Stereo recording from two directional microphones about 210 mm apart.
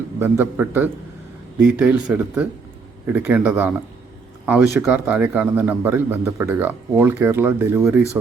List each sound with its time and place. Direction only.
0.2 s a man's voice: 10° right (ahead or behind)